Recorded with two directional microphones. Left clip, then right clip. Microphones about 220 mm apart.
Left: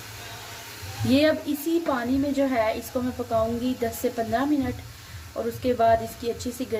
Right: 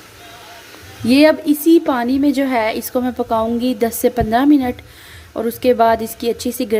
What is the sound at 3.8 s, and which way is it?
A woman's voice, 40° right (ahead or behind).